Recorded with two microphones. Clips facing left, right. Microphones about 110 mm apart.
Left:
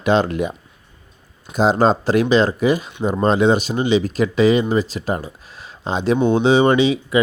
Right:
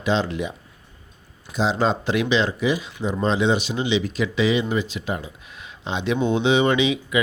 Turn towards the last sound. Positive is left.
turn(degrees=35)  # may be behind; listen again after turning